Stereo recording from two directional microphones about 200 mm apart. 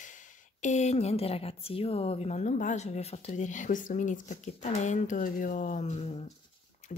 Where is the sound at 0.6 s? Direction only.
35° left (ahead or behind).